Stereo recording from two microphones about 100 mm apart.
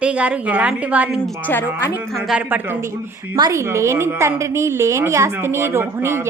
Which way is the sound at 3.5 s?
30° right (ahead or behind).